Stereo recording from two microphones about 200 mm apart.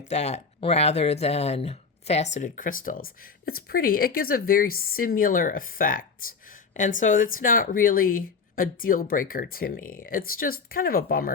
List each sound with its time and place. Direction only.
0.0 s speech: 35° left (ahead or behind)